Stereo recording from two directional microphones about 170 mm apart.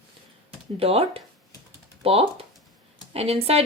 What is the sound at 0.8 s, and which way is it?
Speech, 35° right (ahead or behind).